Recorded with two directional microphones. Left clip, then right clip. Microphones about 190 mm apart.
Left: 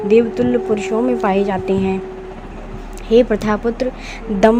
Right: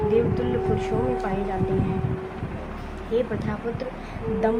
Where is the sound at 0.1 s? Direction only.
45° left (ahead or behind).